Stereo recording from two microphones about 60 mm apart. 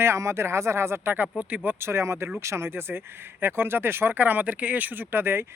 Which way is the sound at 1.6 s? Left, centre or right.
Right.